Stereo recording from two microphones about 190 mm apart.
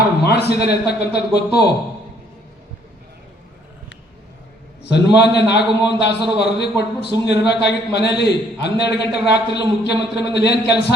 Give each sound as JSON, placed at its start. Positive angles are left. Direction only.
{"t": 0.3, "sound": "a man's voice", "side_deg": 60}
{"t": 4.8, "sound": "a man's voice", "side_deg": 60}